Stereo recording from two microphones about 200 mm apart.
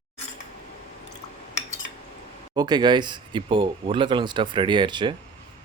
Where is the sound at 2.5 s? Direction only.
20° right (ahead or behind).